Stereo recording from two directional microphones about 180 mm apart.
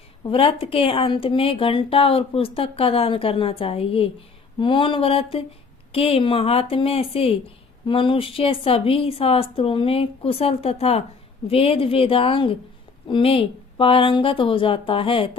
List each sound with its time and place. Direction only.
0.2 s a woman's voice: 30° left (ahead or behind)